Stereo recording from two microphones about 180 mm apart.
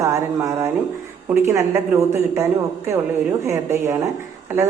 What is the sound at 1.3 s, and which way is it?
A woman's voice, 15° right (ahead or behind).